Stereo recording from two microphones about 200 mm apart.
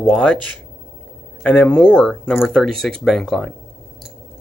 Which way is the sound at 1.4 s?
5° left (ahead or behind).